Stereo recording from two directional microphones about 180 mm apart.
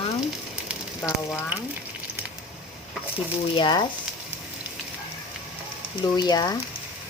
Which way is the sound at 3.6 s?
25° left (ahead or behind).